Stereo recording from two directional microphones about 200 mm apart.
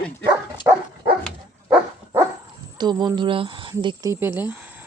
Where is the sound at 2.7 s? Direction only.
20° right (ahead or behind).